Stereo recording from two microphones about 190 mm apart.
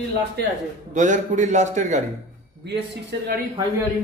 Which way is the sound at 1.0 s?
40° right (ahead or behind).